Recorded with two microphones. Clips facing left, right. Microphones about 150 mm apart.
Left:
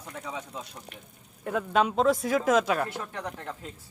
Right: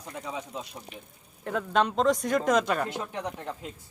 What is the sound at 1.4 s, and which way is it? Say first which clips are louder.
A man's voice: left 1 dB; 5° left (ahead or behind).